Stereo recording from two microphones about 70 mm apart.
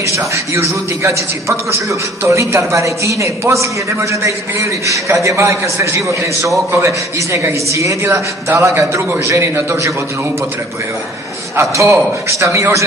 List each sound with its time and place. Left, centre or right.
0.0 s a man's voice: right
11.5 s a man's voice: right